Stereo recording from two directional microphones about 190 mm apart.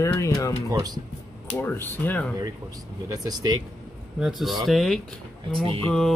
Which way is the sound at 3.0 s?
20° right (ahead or behind).